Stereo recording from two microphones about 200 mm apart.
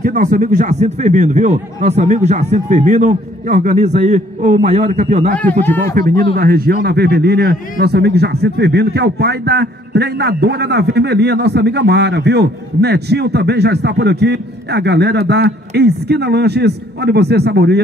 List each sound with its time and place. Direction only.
0.0 s a man's voice: 45° right (ahead or behind)